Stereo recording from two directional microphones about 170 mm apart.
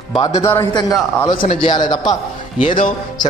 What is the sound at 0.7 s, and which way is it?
Speech, 25° left (ahead or behind).